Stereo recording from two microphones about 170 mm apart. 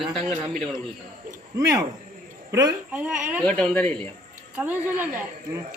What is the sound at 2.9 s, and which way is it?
Speech, 10° right (ahead or behind).